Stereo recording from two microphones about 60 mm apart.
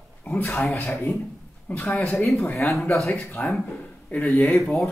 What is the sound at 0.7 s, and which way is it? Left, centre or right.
Speech, left.